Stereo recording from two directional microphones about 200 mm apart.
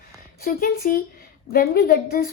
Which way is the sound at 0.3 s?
45° left (ahead or behind).